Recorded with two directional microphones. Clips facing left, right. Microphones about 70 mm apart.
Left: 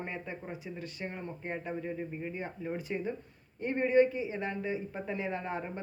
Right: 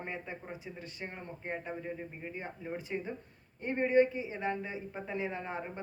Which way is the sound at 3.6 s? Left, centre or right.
Centre.